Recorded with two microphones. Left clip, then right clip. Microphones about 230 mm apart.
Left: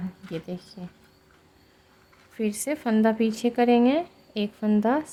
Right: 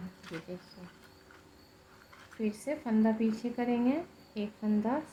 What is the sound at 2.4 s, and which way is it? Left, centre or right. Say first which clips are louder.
Speech: left 7 dB; left.